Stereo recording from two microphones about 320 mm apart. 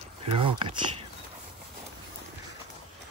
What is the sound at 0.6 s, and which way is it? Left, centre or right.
Speech, centre.